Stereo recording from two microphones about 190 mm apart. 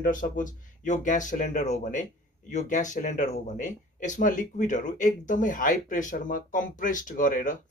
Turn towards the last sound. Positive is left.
turn(degrees=45)  # may be behind; listen again after turning